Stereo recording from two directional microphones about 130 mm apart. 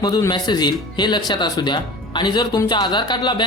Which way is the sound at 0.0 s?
30° left (ahead or behind).